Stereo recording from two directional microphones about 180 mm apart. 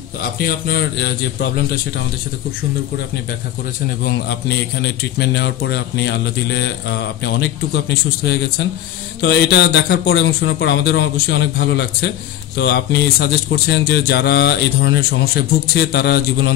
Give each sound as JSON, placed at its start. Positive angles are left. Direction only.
{"t": 0.5, "sound": "a man's voice", "side_deg": 60}
{"t": 4.0, "sound": "a man's voice", "side_deg": 70}